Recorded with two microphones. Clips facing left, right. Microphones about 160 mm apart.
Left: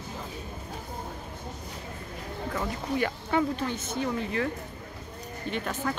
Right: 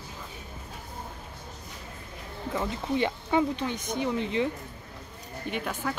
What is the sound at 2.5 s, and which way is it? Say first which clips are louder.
Speech: right 2 dB; 20° right (ahead or behind).